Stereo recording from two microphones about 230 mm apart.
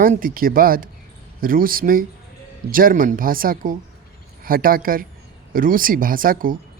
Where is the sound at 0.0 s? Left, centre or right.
Right.